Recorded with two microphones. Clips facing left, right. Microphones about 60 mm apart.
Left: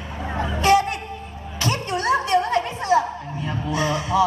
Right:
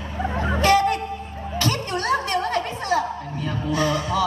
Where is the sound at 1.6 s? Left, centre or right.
Left.